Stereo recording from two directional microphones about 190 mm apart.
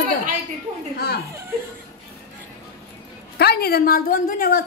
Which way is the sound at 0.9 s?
55° left (ahead or behind).